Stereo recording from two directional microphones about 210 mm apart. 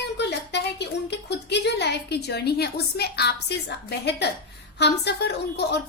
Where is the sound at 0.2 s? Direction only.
55° left (ahead or behind).